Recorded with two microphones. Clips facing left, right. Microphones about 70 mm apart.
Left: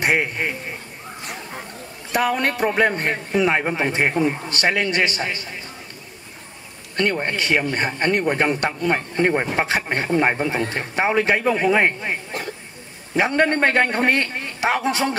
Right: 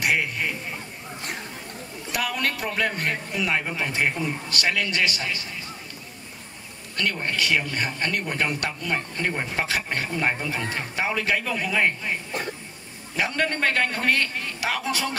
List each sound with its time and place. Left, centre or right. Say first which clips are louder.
0.0 s a man's voice: left 4 dB; left
2.1 s a man's voice: left 7 dB; left
7.0 s a man's voice: left 5 dB; left